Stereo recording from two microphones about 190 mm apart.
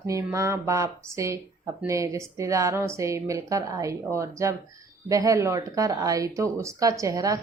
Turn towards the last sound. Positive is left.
turn(degrees=-15)  # may be behind; listen again after turning